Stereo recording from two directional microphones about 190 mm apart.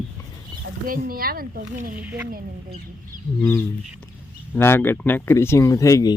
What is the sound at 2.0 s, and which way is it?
Speech, 10° right (ahead or behind).